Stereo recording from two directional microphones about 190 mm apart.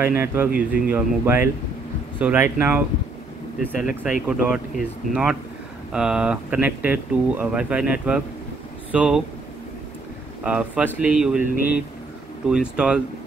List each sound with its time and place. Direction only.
0.0 s speech: 10° right (ahead or behind)
4.0 s speech: 5° right (ahead or behind)
10.4 s speech: 5° right (ahead or behind)
12.4 s speech: 5° right (ahead or behind)